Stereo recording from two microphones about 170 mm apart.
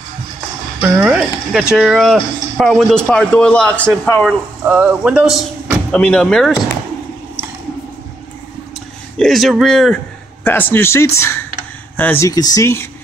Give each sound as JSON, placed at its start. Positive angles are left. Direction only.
{"t": 1.0, "sound": "speech", "side_deg": -5}
{"t": 4.6, "sound": "speech", "side_deg": -5}
{"t": 9.2, "sound": "speech", "side_deg": 0}